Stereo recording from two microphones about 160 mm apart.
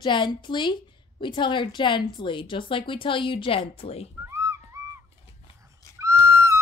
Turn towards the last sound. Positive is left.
turn(degrees=-20)  # may be behind; listen again after turning